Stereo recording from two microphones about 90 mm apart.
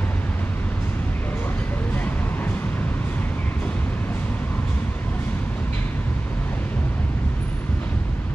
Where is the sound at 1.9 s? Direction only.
20° left (ahead or behind).